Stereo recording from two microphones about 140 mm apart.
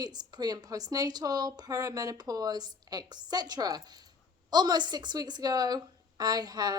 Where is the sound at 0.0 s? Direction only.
30° right (ahead or behind).